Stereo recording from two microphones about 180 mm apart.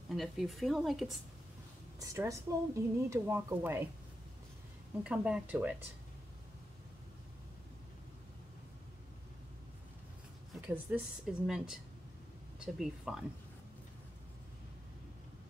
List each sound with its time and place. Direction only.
0.1 s speech: centre (ahead or behind)
2.0 s speech: 20° right (ahead or behind)
5.0 s speech: 5° right (ahead or behind)
10.7 s speech: 5° right (ahead or behind)